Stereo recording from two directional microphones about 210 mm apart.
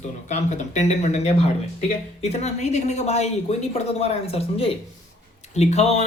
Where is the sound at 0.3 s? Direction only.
35° left (ahead or behind).